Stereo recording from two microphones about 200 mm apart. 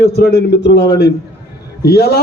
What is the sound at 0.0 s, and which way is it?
A man's voice, 55° left (ahead or behind).